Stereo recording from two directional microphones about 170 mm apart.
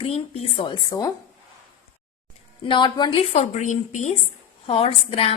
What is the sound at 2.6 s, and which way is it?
Speech, 30° left (ahead or behind).